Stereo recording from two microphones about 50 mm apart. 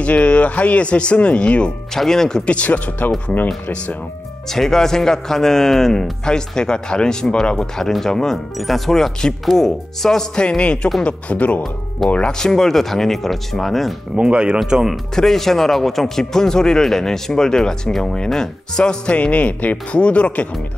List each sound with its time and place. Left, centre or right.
0.0 s speech: left
2.0 s speech: centre
2.4 s speech: left
4.5 s speech: centre; by 11.6 s left
12.3 s speech: centre
14.1 s speech: right
15.1 s speech: centre; by 20.4 s left